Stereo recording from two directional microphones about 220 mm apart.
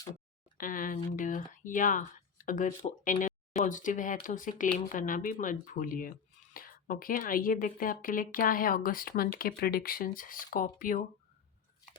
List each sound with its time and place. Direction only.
0.5 s speech: 40° left (ahead or behind)